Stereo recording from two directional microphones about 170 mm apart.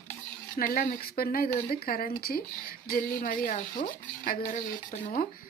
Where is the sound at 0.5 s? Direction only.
55° left (ahead or behind).